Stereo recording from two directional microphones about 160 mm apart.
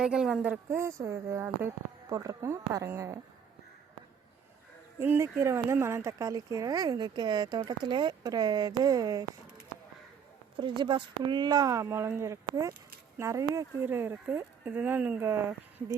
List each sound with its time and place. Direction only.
0.0 s a woman's voice: 5° right (ahead or behind)
0.7 s speech: 15° right (ahead or behind)
4.9 s speech: 15° right (ahead or behind)
10.6 s speech: 30° right (ahead or behind)